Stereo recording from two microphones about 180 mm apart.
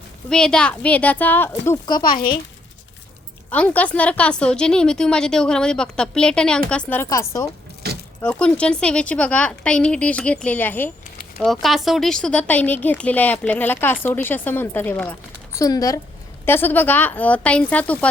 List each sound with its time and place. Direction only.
0.3 s speech: 5° left (ahead or behind); by 2.2 s 25° left (ahead or behind)
3.5 s a woman's voice: 10° left (ahead or behind)
7.8 s keys jangling: 65° right (ahead or behind)
8.2 s speech: 5° left (ahead or behind)
11.3 s speech: centre (ahead or behind)